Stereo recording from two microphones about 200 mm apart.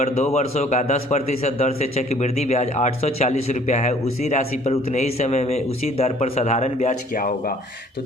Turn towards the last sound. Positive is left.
turn(degrees=50)  # may be behind; listen again after turning